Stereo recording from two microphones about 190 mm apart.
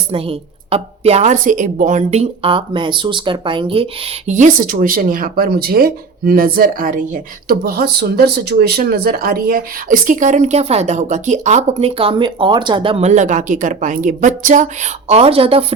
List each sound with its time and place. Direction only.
0.1 s a woman's voice: 30° right (ahead or behind)